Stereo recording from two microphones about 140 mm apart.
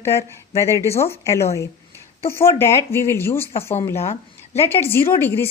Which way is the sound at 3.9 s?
50° left (ahead or behind).